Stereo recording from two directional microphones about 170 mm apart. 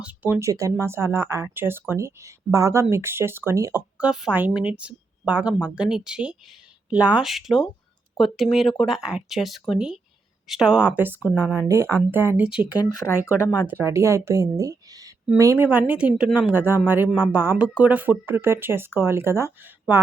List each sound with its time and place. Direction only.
0.0 s speech: 10° right (ahead or behind)
12.8 s speech: 20° left (ahead or behind)
13.7 s speech: 15° right (ahead or behind)